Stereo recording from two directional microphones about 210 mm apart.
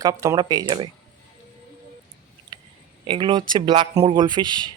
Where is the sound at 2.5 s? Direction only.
20° right (ahead or behind).